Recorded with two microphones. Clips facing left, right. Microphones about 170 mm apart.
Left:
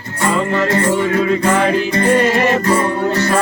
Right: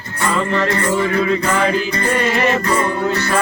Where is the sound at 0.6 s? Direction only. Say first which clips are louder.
Left 2 dB; 45° left (ahead or behind).